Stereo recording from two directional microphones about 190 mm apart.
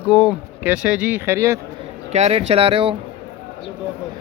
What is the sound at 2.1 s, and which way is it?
Speech, 35° right (ahead or behind).